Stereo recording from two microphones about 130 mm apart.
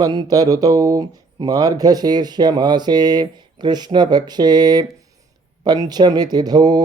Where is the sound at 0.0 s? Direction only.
30° right (ahead or behind).